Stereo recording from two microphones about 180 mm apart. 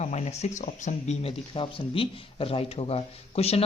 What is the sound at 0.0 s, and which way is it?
Speech, 40° left (ahead or behind).